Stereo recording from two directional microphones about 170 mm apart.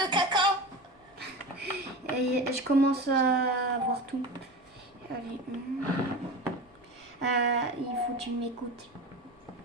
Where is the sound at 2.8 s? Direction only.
70° right (ahead or behind).